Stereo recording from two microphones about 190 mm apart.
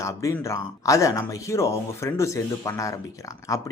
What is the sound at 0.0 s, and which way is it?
Speech, 15° left (ahead or behind).